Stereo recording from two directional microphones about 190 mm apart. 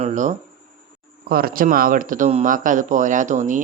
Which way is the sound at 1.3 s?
50° right (ahead or behind).